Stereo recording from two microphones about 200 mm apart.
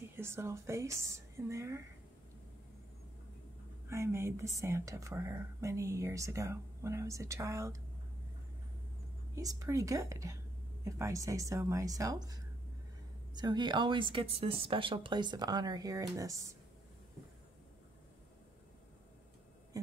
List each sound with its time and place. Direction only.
0.1 s a woman's voice: 10° right (ahead or behind)
3.9 s speech: 15° right (ahead or behind)
9.3 s speech: 15° right (ahead or behind)